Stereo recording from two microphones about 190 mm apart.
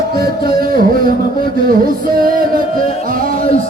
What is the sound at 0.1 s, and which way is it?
Music, 50° right (ahead or behind).